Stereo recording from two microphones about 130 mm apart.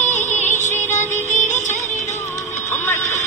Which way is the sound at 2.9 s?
65° left (ahead or behind).